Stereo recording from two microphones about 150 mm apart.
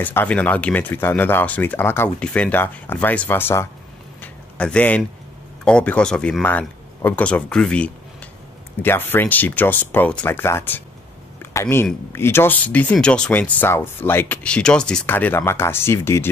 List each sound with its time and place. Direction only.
0.0 s speech: 15° left (ahead or behind)
4.2 s a sound: 10° left (ahead or behind)
5.7 s speech: 5° left (ahead or behind)